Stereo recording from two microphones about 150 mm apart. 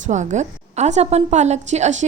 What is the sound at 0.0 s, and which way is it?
A woman's voice, 55° right (ahead or behind).